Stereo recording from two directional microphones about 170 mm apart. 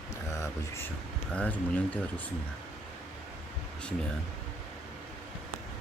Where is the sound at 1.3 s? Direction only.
10° left (ahead or behind).